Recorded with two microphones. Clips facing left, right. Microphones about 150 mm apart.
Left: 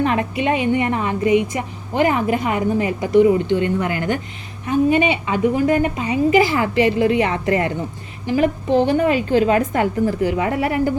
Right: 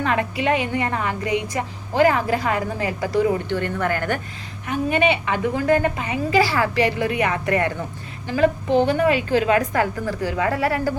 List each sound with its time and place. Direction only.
0.0 s a woman's voice: 25° left (ahead or behind)
8.9 s a woman's voice: 30° left (ahead or behind)